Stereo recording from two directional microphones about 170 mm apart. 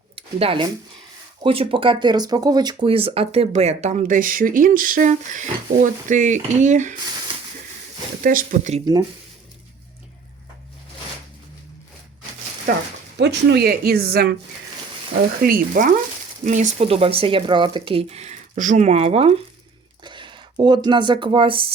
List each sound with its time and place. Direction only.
0.2 s speech: 35° right (ahead or behind)
8.2 s speech: 55° right (ahead or behind)
12.7 s speech: 55° right (ahead or behind)
13.1 s speech: 85° right; by 14.3 s 65° right (ahead or behind)
15.4 s speech: 55° right (ahead or behind); by 21.7 s 30° right (ahead or behind)